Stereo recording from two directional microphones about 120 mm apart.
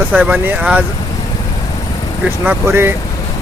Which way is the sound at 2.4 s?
20° right (ahead or behind).